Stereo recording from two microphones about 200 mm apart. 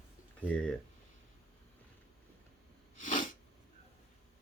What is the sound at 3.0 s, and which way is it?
Sneeze, 40° left (ahead or behind).